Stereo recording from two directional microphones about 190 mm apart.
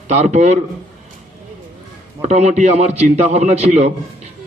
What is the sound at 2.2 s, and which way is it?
Speech, 35° right (ahead or behind).